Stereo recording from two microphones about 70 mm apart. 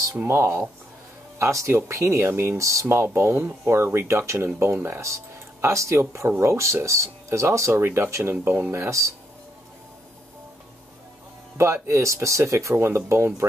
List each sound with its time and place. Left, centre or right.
0.1 s speech: right
2.6 s speech: right
8.7 s speech: right
11.5 s speech: right